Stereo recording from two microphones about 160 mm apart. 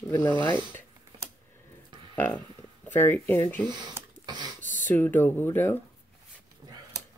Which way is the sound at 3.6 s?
25° right (ahead or behind).